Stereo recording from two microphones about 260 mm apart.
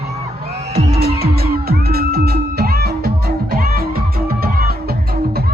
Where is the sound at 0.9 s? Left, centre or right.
Right.